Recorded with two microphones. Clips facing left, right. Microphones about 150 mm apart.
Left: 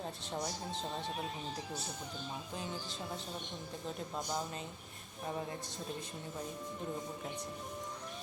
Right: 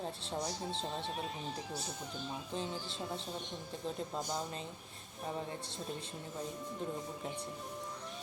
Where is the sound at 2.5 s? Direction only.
25° right (ahead or behind).